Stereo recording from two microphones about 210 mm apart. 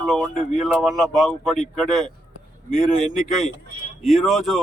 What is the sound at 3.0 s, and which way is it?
Speech, 35° left (ahead or behind).